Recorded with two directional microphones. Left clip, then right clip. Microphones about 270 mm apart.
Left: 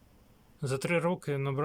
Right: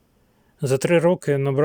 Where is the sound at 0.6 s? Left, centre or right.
Right.